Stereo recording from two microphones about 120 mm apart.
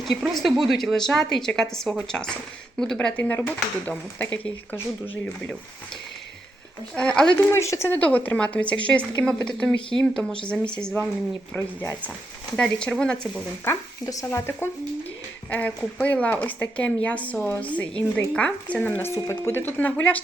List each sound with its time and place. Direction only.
0.0 s a woman's voice: centre (ahead or behind)
6.9 s speech: 10° left (ahead or behind)
7.5 s a woman's voice: 25° left (ahead or behind); by 13.4 s 5° left (ahead or behind)
13.7 s speech: 30° left (ahead or behind); by 20.1 s 15° left (ahead or behind)